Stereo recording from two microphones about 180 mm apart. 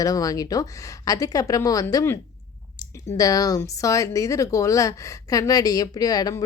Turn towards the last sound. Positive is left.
turn(degrees=20)  # may be behind; listen again after turning